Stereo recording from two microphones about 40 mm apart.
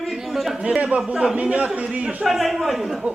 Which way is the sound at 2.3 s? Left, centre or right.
Centre.